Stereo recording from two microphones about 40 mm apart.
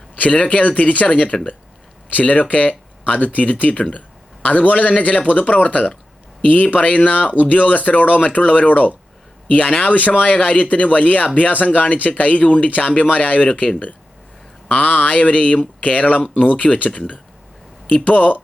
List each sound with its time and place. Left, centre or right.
0.2 s speech: left
2.0 s speech: left
14.7 s speech: left
16.9 s speech: left